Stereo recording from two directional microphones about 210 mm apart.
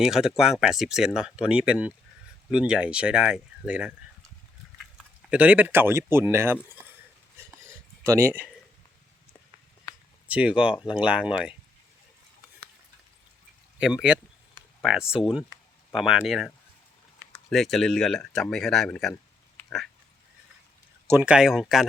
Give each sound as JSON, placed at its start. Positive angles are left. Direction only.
{"t": 0.0, "sound": "speech", "side_deg": 0}
{"t": 4.9, "sound": "speech", "side_deg": -5}
{"t": 8.0, "sound": "speech", "side_deg": -10}
{"t": 10.2, "sound": "speech", "side_deg": -5}
{"t": 13.7, "sound": "speech", "side_deg": -5}
{"t": 19.5, "sound": "a sound", "side_deg": 0}
{"t": 21.1, "sound": "speech", "side_deg": -5}